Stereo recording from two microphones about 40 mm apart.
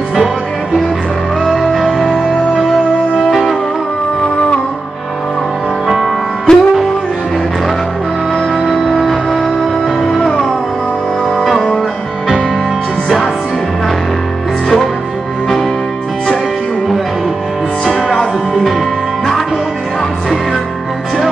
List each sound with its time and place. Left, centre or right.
1.5 s music: centre
6.5 s music: centre
8.5 s music: centre
10.0 s music: centre
11.3 s music: centre
17.8 s music: centre